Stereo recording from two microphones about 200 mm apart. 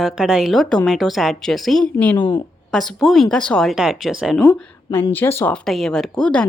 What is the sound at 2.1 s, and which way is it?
Speech, 25° left (ahead or behind).